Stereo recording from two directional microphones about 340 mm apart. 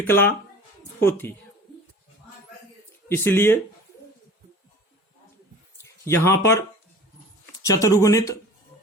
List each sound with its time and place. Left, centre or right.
0.0 s speech: centre
3.1 s speech: centre
5.8 s speech: centre